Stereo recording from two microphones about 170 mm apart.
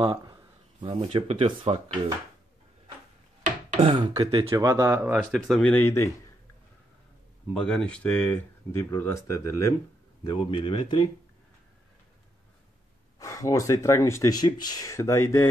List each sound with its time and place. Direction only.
0.0 s speech: 25° right (ahead or behind)
3.4 s a sound: 35° right (ahead or behind)
4.1 s speech: 25° right (ahead or behind); by 6.0 s 15° left (ahead or behind)
7.5 s speech: 5° left (ahead or behind)
10.2 s speech: 30° left (ahead or behind)
13.2 s speech: 20° left (ahead or behind)